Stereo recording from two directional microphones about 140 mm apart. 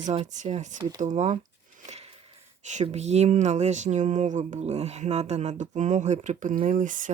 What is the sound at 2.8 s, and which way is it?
Speech, 50° right (ahead or behind).